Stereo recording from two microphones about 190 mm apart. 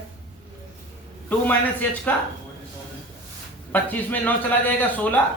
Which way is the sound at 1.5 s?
10° left (ahead or behind).